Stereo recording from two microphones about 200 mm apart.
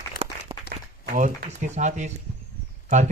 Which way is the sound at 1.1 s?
40° right (ahead or behind).